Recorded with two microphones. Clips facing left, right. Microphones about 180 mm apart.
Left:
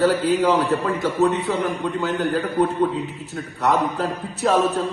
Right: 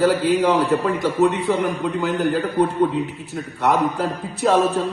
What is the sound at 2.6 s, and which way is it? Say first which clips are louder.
Speech: right 1 dB; 10° right (ahead or behind).